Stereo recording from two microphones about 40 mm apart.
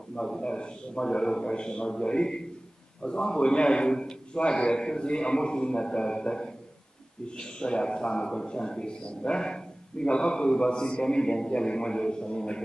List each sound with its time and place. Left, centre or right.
0.1 s a man's voice: centre